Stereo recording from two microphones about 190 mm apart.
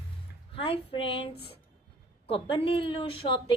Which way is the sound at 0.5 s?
30° left (ahead or behind).